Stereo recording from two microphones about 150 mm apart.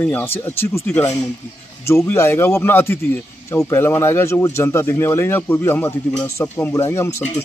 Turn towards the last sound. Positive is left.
turn(degrees=20)  # may be behind; listen again after turning